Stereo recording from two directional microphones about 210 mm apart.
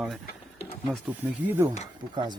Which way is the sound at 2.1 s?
20° right (ahead or behind).